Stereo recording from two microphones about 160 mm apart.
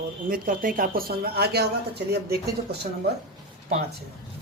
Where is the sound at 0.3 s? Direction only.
60° right (ahead or behind); by 2.4 s 85° right.